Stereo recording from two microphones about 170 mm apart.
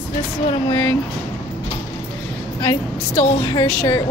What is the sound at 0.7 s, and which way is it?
Speech, 15° left (ahead or behind).